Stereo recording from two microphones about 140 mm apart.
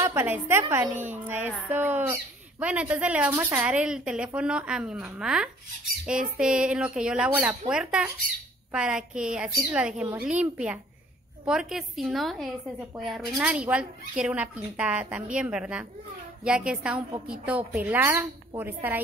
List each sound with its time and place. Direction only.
0.0 s a woman's voice: 15° right (ahead or behind)